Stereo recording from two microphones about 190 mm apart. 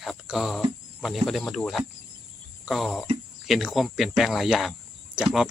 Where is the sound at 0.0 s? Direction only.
Centre (ahead or behind).